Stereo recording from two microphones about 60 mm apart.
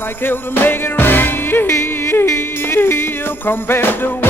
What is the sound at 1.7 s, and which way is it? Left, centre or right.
Music, left.